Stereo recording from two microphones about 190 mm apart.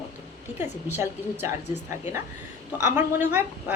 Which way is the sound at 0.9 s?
10° right (ahead or behind).